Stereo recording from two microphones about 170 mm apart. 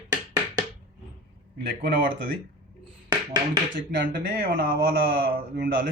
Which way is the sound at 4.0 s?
65° right (ahead or behind).